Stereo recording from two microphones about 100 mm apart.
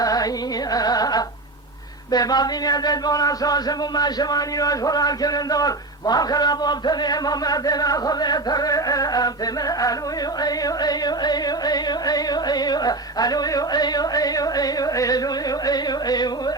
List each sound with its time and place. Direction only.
0.0 s music: 40° left (ahead or behind)
2.0 s speech: 40° left (ahead or behind)